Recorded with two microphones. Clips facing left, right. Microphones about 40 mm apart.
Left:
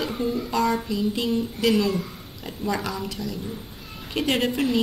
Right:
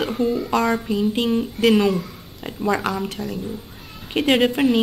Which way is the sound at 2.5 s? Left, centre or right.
Right.